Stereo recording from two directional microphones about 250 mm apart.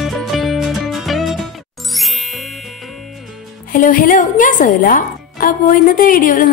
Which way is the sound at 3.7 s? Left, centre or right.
Left.